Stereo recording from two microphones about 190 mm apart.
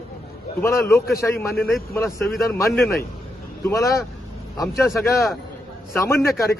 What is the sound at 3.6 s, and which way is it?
A man's voice, 15° left (ahead or behind).